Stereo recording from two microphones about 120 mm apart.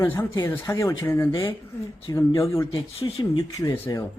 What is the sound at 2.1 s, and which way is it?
Speech, 25° left (ahead or behind).